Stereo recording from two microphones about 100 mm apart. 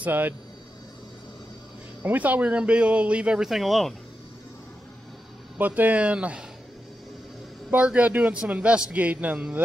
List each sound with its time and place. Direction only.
0.0 s speech: 20° right (ahead or behind)
2.0 s a man's voice: 15° right (ahead or behind); by 3.9 s centre (ahead or behind)
5.6 s a man's voice: 15° right (ahead or behind)
7.7 s a man's voice: 15° right (ahead or behind)